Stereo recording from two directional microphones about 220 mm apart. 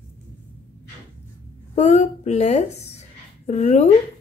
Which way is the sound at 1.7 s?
30° left (ahead or behind).